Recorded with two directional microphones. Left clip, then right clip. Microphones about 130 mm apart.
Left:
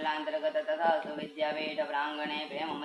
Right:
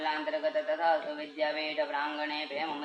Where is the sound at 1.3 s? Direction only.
20° right (ahead or behind).